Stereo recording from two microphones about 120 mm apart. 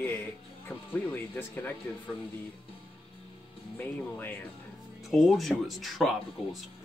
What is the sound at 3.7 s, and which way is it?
Speech, 15° left (ahead or behind).